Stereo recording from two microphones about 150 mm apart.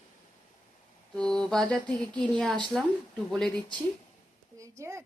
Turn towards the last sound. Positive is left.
turn(degrees=-20)  # may be behind; listen again after turning